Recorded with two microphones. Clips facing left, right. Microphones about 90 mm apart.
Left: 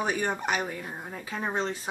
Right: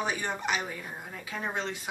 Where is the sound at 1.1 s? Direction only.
35° left (ahead or behind).